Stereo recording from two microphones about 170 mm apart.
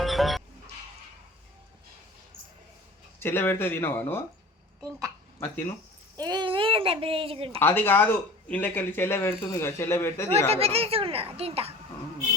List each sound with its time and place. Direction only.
0.0 s music: centre (ahead or behind)
3.2 s speech: 15° left (ahead or behind)
4.8 s a child's voice: 20° right (ahead or behind)
5.4 s speech: 10° left (ahead or behind)
6.1 s speech: 25° right (ahead or behind)
7.6 s speech: 15° left (ahead or behind)
10.5 s speech: 35° right (ahead or behind)